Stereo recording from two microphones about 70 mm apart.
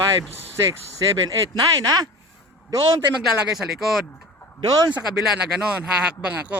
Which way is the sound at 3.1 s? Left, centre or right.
Centre.